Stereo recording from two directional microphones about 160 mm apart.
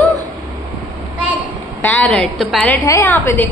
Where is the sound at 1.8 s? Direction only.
10° left (ahead or behind).